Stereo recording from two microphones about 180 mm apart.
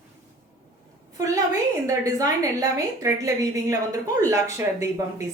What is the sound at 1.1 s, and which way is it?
A woman's voice, 20° right (ahead or behind).